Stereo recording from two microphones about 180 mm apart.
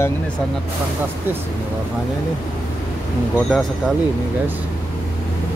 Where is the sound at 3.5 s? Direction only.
Centre (ahead or behind).